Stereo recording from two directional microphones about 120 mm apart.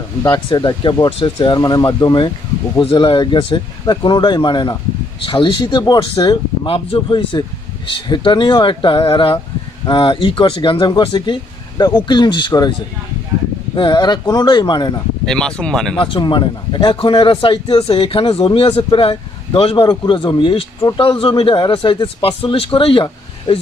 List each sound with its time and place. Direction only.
0.6 s a man's voice: 35° left (ahead or behind)
13.7 s speech: 40° left (ahead or behind)
15.2 s speech: 5° left (ahead or behind)
16.0 s a man's voice: 45° left (ahead or behind)